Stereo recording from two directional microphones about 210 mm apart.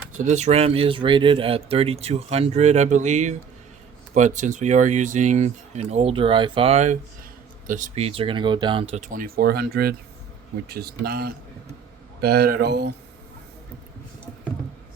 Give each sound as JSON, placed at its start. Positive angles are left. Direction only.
{"t": 0.2, "sound": "speech", "side_deg": -35}
{"t": 9.0, "sound": "speech", "side_deg": -40}